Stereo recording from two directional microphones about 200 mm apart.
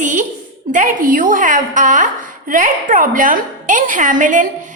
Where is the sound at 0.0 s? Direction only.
40° right (ahead or behind).